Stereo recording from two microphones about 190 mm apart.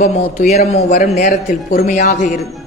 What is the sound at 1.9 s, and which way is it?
Speech, 40° left (ahead or behind).